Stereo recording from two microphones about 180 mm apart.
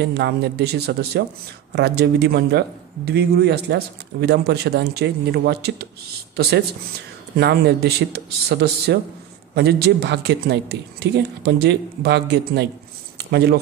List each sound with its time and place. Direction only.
0.0 s a man's voice: 65° right (ahead or behind)
7.3 s a man's voice: 65° right (ahead or behind)